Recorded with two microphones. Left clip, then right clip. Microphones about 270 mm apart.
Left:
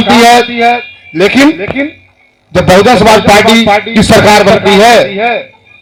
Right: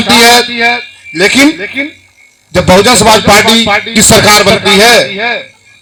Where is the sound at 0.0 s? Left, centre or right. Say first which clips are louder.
Left 1 dB; right.